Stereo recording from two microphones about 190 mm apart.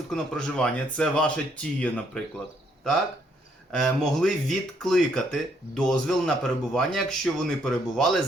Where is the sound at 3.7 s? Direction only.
Centre (ahead or behind).